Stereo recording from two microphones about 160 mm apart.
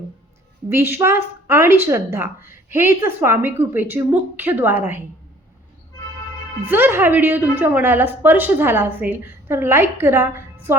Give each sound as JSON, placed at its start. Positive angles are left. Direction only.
{"t": 0.7, "sound": "a woman's voice", "side_deg": -15}
{"t": 6.7, "sound": "a woman's voice", "side_deg": -15}